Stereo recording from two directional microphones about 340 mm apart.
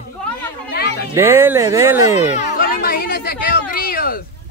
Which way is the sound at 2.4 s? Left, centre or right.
Left.